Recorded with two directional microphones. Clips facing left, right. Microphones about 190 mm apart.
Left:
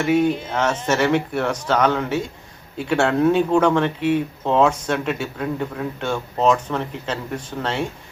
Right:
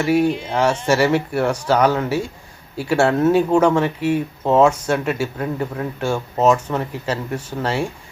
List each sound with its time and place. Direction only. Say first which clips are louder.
0.0 s speech: right 1 dB; 10° right (ahead or behind)